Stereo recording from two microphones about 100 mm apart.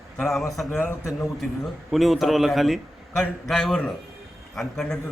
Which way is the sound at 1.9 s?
Centre (ahead or behind).